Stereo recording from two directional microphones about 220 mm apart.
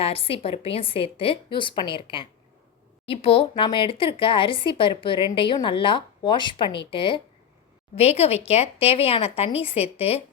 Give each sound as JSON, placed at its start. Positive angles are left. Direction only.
{"t": 0.0, "sound": "speech", "side_deg": 25}